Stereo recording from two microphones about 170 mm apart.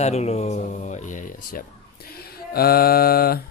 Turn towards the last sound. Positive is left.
turn(degrees=65)  # may be behind; listen again after turning